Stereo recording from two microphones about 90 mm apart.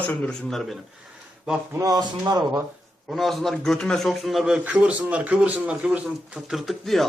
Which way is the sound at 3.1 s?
5° left (ahead or behind).